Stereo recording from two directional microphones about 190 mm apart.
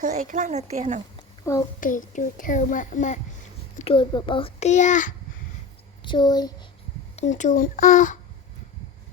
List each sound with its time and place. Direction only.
0.0 s a woman's voice: 45° right (ahead or behind)
1.5 s a child's voice: 15° left (ahead or behind)
1.8 s a child's voice: 45° left (ahead or behind)
3.8 s a child's voice: 30° left (ahead or behind)
6.0 s speech: 25° left (ahead or behind)
7.2 s a child's voice: 40° left (ahead or behind)